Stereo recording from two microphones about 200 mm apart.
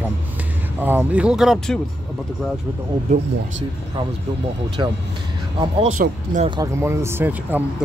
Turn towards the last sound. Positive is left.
turn(degrees=-10)  # may be behind; listen again after turning